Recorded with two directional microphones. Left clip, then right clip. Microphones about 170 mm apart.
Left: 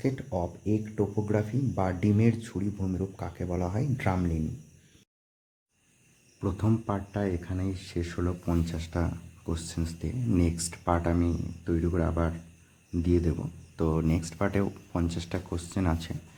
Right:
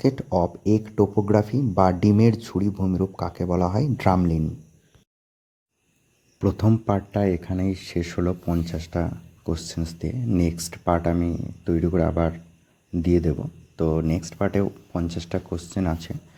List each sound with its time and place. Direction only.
0.0 s speech: 45° right (ahead or behind)
6.4 s speech: 35° right (ahead or behind)
8.4 s speech: 20° right (ahead or behind)